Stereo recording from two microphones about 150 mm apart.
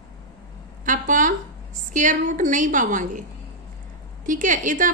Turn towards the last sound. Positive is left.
turn(degrees=-60)  # may be behind; listen again after turning